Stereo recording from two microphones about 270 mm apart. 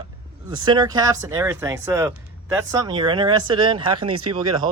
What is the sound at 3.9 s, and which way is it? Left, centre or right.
Speech, right.